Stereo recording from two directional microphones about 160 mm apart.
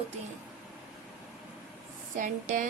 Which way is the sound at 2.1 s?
55° right (ahead or behind).